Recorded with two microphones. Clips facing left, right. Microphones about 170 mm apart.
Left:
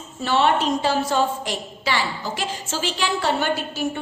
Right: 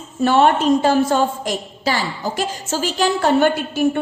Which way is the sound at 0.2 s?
50° right (ahead or behind).